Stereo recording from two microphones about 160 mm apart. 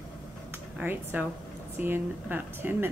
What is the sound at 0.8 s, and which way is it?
A woman's voice, 10° right (ahead or behind).